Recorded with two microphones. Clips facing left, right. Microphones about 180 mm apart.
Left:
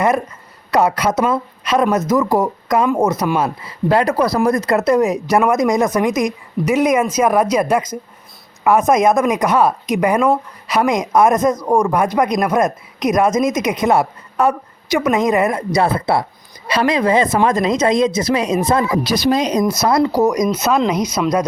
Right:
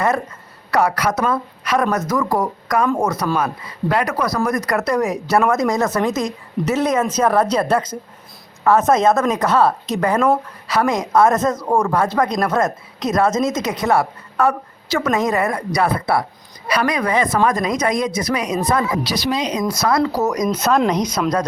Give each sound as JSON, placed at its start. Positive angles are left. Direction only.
{"t": 0.7, "sound": "a man's voice", "side_deg": 20}
{"t": 19.0, "sound": "speech", "side_deg": 50}
{"t": 20.1, "sound": "a man's voice", "side_deg": 15}